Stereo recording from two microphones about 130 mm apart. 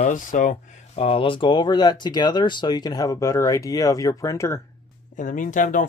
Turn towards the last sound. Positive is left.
turn(degrees=80)